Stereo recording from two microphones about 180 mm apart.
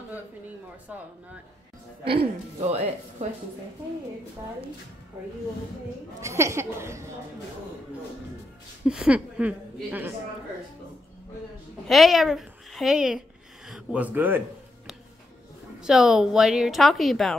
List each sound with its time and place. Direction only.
2.0 s speech: 35° right (ahead or behind)
6.2 s a woman's voice: 15° right (ahead or behind)
8.8 s a woman's voice: 5° right (ahead or behind)
11.9 s a woman's voice: centre (ahead or behind)
15.8 s a woman's voice: 5° right (ahead or behind)